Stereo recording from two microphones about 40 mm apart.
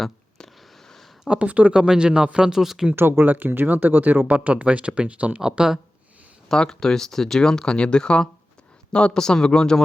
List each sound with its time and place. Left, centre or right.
0.3 s a sound: centre
1.3 s speech: right
1.7 s a man's voice: right
2.5 s speech: centre
2.9 s speech: right
3.2 s speech: right
4.3 s speech: right
5.4 s speech: centre
6.5 s speech: centre